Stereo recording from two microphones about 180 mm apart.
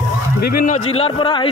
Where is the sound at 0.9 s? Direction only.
30° left (ahead or behind).